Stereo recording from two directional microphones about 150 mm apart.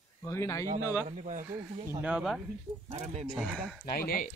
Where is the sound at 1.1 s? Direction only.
55° right (ahead or behind).